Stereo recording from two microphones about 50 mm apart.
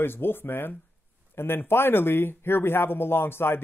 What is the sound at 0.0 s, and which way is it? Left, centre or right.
Speech, left.